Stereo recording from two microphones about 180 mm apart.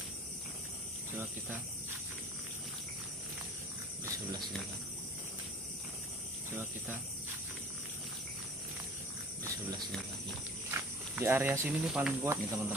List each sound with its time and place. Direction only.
6.5 s speech: 10° right (ahead or behind)
10.7 s speech: 15° right (ahead or behind)